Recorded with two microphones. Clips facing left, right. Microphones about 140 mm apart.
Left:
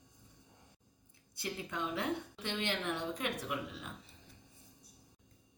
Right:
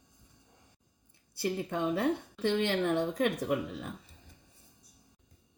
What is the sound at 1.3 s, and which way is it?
A woman's voice, 65° right (ahead or behind).